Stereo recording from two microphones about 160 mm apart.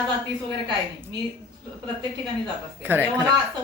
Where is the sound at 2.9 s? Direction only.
15° right (ahead or behind).